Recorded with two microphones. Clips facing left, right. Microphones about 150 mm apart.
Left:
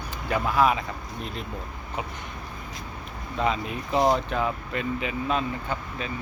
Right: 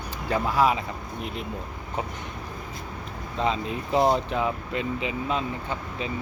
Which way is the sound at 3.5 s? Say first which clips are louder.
Right 1 dB; 25° right (ahead or behind).